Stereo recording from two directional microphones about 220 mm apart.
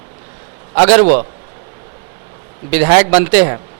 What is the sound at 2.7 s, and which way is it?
Speech, 10° right (ahead or behind).